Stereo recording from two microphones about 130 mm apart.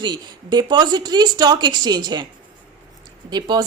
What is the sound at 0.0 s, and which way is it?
Speech, 35° right (ahead or behind).